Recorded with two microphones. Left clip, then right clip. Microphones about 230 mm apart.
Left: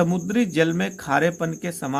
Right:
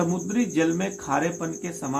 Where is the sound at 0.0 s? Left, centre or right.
Left.